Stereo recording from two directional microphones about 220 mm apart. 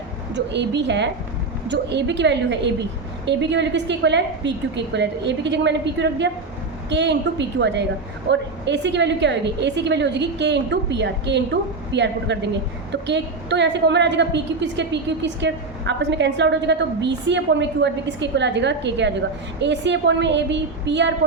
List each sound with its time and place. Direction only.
0.3 s a woman's voice: 50° right (ahead or behind)